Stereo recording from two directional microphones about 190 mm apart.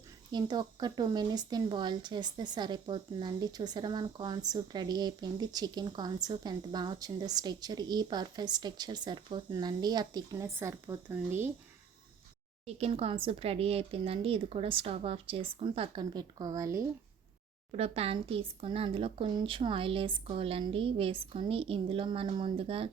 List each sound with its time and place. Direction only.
0.3 s speech: 25° right (ahead or behind)
12.6 s speech: 30° right (ahead or behind); by 16.8 s 15° right (ahead or behind)
17.7 s speech: 30° right (ahead or behind)